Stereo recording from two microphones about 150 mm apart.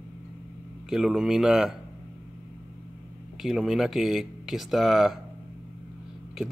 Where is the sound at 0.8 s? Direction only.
5° right (ahead or behind).